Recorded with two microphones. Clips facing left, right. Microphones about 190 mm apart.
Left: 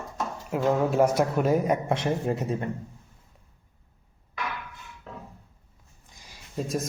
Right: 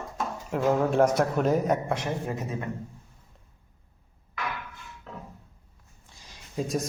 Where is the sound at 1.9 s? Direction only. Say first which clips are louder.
Left 4 dB; 30° left (ahead or behind).